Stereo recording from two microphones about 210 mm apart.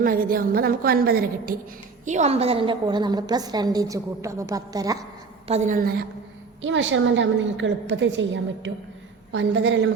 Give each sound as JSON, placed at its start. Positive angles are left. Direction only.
{"t": 0.0, "sound": "a woman's voice", "side_deg": -45}
{"t": 2.0, "sound": "a woman's voice", "side_deg": -35}
{"t": 5.5, "sound": "a woman's voice", "side_deg": -35}
{"t": 6.6, "sound": "a woman's voice", "side_deg": -65}